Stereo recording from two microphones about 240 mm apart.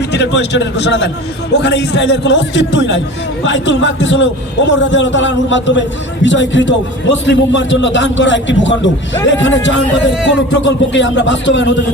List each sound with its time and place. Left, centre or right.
0.1 s a man's voice: left